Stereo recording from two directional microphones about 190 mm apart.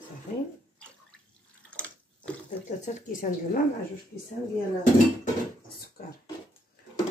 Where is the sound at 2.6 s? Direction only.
40° left (ahead or behind).